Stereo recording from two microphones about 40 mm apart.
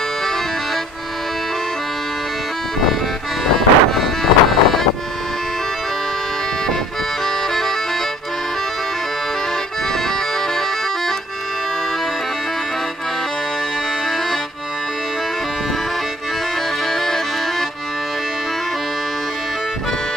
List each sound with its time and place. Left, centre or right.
3.4 s music: centre
7.2 s music: centre
16.8 s accordion: centre